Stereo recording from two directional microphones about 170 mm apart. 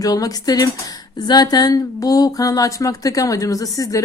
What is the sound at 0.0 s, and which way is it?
Speech, 20° left (ahead or behind).